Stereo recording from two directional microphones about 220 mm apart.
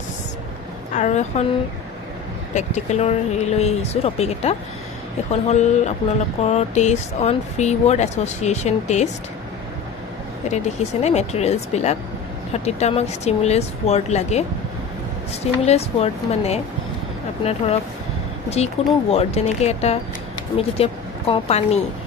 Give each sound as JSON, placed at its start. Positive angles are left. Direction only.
{"t": 0.9, "sound": "speech", "side_deg": 30}
{"t": 2.5, "sound": "speech", "side_deg": 30}
{"t": 10.5, "sound": "speech", "side_deg": 30}
{"t": 15.6, "sound": "speech", "side_deg": 30}
{"t": 19.0, "sound": "speech", "side_deg": 30}